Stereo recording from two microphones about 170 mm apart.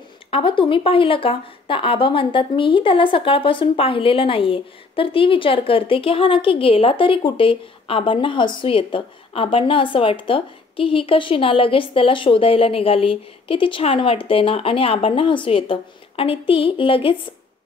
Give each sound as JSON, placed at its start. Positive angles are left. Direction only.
{"t": 0.3, "sound": "speech", "side_deg": 30}